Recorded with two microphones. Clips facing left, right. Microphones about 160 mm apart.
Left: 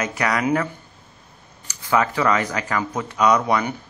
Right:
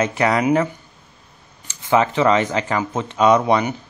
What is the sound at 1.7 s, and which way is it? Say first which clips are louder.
Speech: right 3 dB; 25° right (ahead or behind).